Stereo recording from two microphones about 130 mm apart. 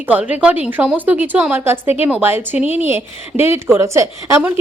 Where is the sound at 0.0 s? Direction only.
10° right (ahead or behind).